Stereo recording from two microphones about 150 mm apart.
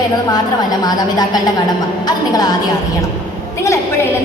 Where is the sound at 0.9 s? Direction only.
25° left (ahead or behind).